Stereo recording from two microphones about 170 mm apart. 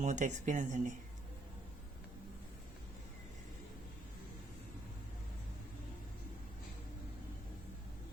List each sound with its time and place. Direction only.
0.0 s speech: 45° right (ahead or behind)